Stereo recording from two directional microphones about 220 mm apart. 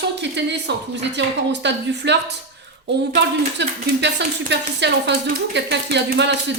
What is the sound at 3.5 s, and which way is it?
Speech, 50° right (ahead or behind).